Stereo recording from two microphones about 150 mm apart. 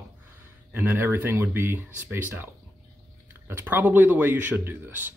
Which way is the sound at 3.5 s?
15° right (ahead or behind).